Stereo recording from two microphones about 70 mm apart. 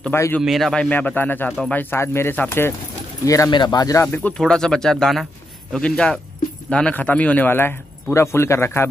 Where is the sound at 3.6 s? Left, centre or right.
Left.